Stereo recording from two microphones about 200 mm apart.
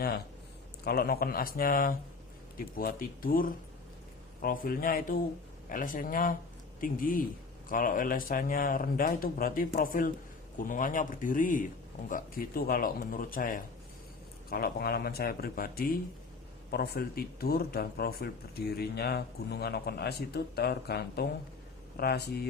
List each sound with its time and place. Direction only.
0.9 s speech: 50° left (ahead or behind)